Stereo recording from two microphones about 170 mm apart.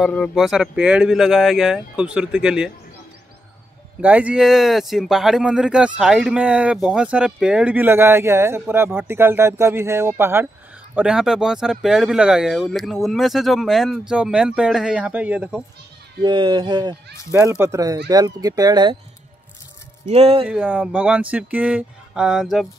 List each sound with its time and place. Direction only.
0.0 s speech: 5° left (ahead or behind)
4.0 s speech: 10° right (ahead or behind)
16.2 s speech: 30° right (ahead or behind)
20.1 s speech: 35° right (ahead or behind)
20.4 s speech: 5° right (ahead or behind)